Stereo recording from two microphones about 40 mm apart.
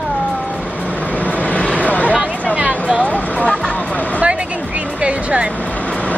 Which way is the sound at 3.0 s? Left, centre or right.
Left.